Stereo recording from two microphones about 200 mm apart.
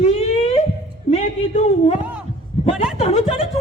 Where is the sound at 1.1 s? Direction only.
35° left (ahead or behind).